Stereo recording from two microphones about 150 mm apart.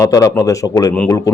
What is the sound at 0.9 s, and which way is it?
Speech, 10° left (ahead or behind).